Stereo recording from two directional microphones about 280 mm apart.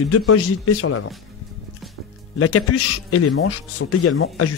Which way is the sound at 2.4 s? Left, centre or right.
Left.